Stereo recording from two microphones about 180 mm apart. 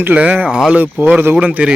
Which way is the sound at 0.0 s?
10° right (ahead or behind).